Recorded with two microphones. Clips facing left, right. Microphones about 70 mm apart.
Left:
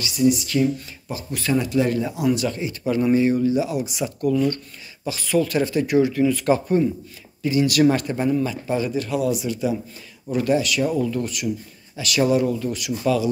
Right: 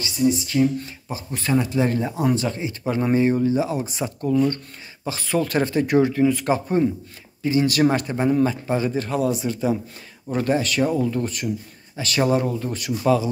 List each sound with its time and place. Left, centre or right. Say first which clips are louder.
0.0 s speech: left 2 dB; right
6.2 s speech: left 1 dB; right